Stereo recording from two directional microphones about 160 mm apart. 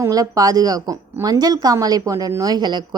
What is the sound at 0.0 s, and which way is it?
Speech, 20° right (ahead or behind).